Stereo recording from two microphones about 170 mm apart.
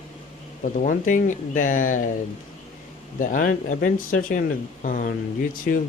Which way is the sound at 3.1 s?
50° left (ahead or behind).